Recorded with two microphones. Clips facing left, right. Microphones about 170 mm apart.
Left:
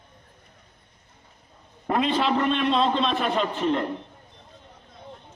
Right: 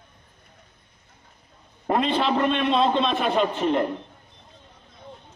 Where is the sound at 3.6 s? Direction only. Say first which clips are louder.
Right 2 dB; 20° right (ahead or behind).